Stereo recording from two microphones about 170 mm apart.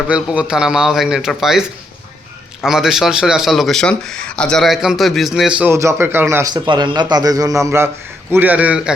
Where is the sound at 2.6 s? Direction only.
Centre (ahead or behind).